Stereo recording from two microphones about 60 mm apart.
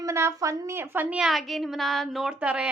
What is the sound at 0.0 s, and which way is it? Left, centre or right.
Speech, right.